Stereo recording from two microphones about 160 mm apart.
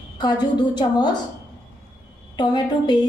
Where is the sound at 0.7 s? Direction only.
25° left (ahead or behind).